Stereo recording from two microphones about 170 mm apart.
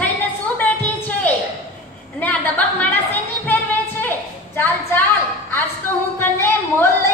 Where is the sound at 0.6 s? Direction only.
10° left (ahead or behind).